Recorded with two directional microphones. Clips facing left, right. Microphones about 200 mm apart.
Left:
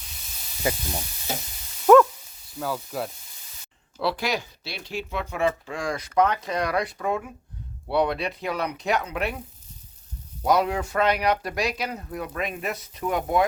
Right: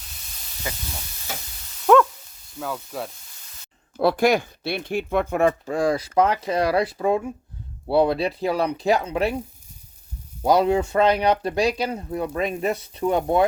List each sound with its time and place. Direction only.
1.9 s dog: 5° left (ahead or behind)
2.6 s speech: centre (ahead or behind)
3.9 s speech: 50° right (ahead or behind); by 9.3 s 30° right (ahead or behind)
10.4 s speech: 30° right (ahead or behind)